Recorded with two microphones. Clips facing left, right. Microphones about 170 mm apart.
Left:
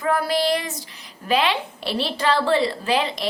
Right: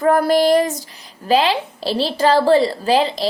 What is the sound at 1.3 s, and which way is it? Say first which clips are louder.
A woman's voice: right 5 dB; 35° right (ahead or behind).